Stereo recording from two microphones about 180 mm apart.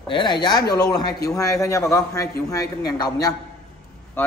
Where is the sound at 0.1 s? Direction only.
25° left (ahead or behind).